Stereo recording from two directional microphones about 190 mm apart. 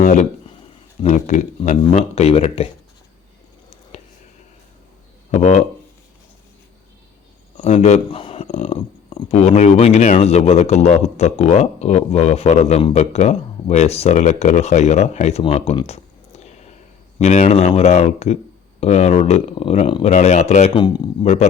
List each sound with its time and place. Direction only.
0.0 s speech: 40° left (ahead or behind)
3.9 s a sound: 35° left (ahead or behind)
5.3 s speech: 35° left (ahead or behind)
7.5 s speech: 35° left (ahead or behind)